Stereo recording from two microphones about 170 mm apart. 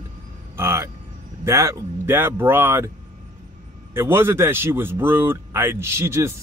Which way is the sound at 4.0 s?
15° right (ahead or behind).